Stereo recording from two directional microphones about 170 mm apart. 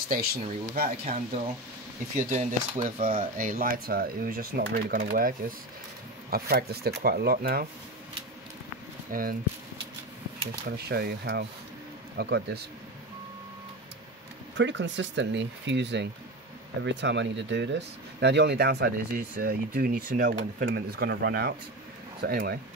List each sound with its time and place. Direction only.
0.1 s speech: 60° right (ahead or behind)
1.1 s speech: 40° right (ahead or behind); by 7.6 s 65° right (ahead or behind)
9.1 s speech: 55° right (ahead or behind)
10.6 s speech: 65° right (ahead or behind)
14.6 s speech: 90° right; by 20.3 s 55° right (ahead or behind)
20.3 s speech: 70° right (ahead or behind)